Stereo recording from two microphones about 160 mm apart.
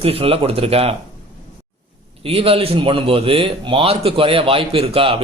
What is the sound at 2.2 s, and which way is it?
A man's voice, 35° right (ahead or behind).